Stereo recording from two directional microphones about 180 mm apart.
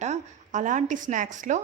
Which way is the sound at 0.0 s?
40° right (ahead or behind).